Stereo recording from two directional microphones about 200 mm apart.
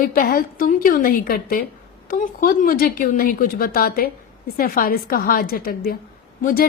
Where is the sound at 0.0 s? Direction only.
45° left (ahead or behind).